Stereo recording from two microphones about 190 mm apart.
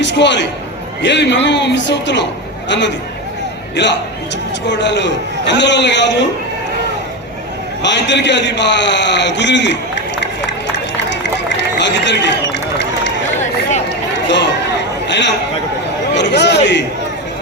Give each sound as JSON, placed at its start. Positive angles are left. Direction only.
{"t": 0.0, "sound": "a man's voice", "side_deg": 70}
{"t": 7.8, "sound": "a man's voice", "side_deg": 65}
{"t": 10.9, "sound": "run", "side_deg": 70}
{"t": 14.3, "sound": "a sound", "side_deg": 70}
{"t": 16.1, "sound": "a man's voice", "side_deg": 65}